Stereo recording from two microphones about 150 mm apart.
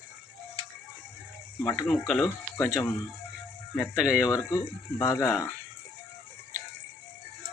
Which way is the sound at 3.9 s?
5° right (ahead or behind).